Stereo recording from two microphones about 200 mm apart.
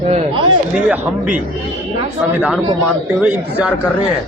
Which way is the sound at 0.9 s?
5° right (ahead or behind).